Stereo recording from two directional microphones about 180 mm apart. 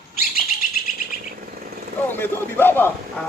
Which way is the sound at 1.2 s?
55° right (ahead or behind).